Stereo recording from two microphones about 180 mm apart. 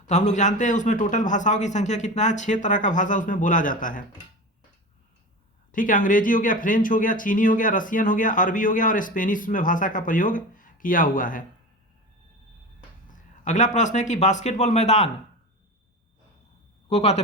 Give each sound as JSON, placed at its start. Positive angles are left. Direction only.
{"t": 0.1, "sound": "speech", "side_deg": 40}
{"t": 5.7, "sound": "speech", "side_deg": 45}
{"t": 13.1, "sound": "speech", "side_deg": 45}
{"t": 16.9, "sound": "speech", "side_deg": 35}